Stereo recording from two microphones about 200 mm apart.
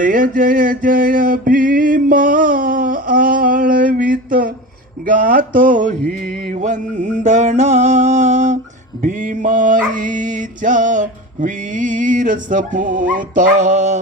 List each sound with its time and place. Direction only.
0.0 s mantra: 45° right (ahead or behind)
5.0 s dog: 40° right (ahead or behind)